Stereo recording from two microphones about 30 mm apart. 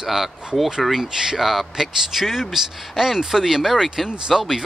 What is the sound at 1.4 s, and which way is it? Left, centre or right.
Speech, centre.